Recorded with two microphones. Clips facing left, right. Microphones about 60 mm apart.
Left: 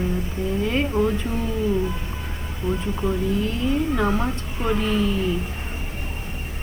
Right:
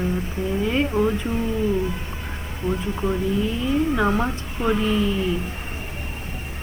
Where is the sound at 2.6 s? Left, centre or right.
Centre.